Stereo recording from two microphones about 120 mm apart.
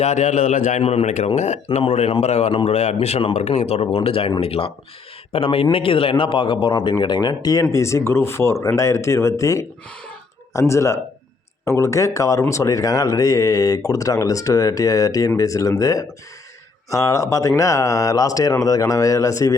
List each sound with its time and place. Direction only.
0.0 s a man's voice: 70° left (ahead or behind)
4.0 s a man's voice: 50° left (ahead or behind); by 19.5 s 25° left (ahead or behind)